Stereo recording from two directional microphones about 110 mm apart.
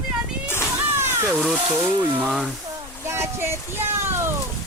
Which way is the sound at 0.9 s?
20° right (ahead or behind).